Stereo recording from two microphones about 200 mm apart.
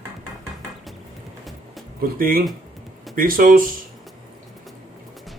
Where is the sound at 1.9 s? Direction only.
45° right (ahead or behind).